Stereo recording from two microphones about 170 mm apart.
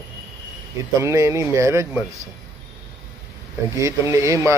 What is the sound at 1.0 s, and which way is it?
Speech, 15° right (ahead or behind).